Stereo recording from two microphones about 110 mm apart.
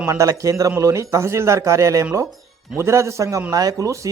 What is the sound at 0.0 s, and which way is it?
A man's voice, 25° right (ahead or behind).